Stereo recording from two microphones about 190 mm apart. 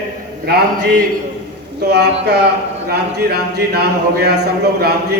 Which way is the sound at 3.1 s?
60° right (ahead or behind).